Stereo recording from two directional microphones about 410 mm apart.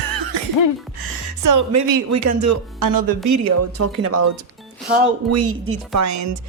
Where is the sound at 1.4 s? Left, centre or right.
Right.